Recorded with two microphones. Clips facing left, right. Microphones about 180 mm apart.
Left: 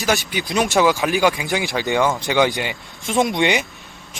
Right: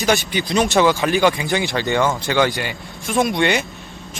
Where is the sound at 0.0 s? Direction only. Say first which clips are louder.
Right 2 dB; centre (ahead or behind).